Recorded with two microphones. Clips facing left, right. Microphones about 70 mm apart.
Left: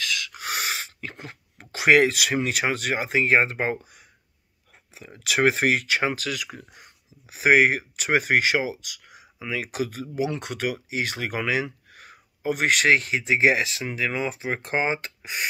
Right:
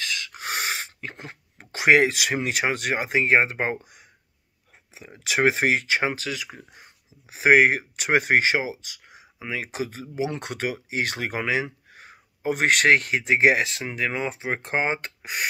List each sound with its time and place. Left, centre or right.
0.0 s speech: right
4.9 s speech: centre; by 13.8 s right
13.8 s speech: right